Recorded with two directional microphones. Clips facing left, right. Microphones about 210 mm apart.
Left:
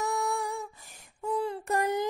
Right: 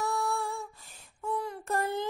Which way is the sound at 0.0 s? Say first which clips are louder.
Left 1 dB; 20° left (ahead or behind).